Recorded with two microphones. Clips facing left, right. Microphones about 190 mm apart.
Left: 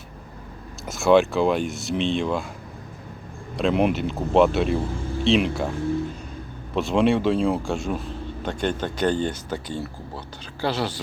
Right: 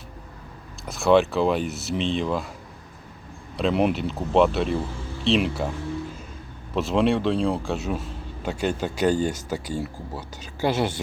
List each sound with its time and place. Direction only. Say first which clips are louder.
0.9 s speech: left 1 dB; centre (ahead or behind)
3.6 s speech: left 1 dB; centre (ahead or behind)
6.7 s speech: left 1 dB; centre (ahead or behind)
10.7 s speech: right 2 dB; 25° right (ahead or behind)